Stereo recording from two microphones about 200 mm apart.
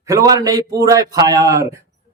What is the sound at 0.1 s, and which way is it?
Speech, 15° right (ahead or behind).